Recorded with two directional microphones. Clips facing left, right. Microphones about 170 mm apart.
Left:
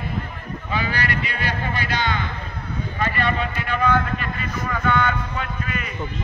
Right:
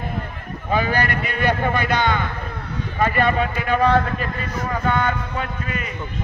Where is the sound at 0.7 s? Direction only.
45° right (ahead or behind).